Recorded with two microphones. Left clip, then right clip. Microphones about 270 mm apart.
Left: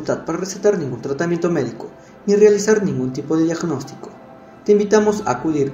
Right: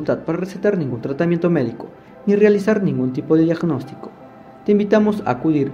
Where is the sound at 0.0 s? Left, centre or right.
Right.